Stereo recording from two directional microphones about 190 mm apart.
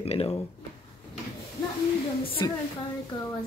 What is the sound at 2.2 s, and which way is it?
Speech, 30° left (ahead or behind).